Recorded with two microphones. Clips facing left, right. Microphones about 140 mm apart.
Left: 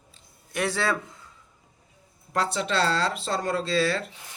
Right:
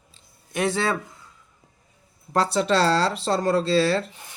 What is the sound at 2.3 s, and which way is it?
Speech, 35° right (ahead or behind).